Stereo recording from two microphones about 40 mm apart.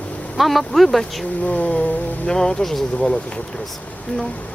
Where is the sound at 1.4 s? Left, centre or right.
Left.